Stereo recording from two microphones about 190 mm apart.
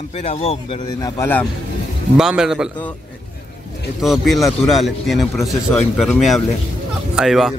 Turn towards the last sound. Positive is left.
turn(degrees=0)  # may be behind; listen again after turning